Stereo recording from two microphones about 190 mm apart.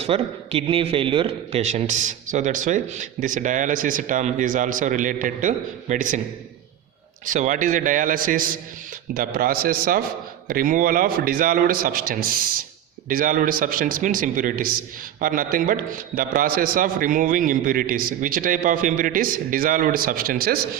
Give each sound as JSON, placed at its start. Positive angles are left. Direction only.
{"t": 0.0, "sound": "a man's voice", "side_deg": -30}
{"t": 7.3, "sound": "a man's voice", "side_deg": -40}